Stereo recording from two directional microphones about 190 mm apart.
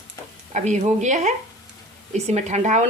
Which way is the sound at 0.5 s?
40° right (ahead or behind).